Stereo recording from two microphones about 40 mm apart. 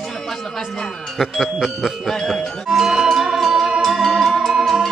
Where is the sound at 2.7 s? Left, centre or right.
Centre.